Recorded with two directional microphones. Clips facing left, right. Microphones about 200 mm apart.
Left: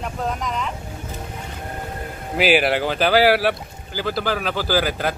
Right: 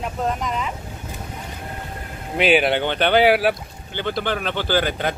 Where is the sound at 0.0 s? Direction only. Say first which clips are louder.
Right 2 dB; centre (ahead or behind).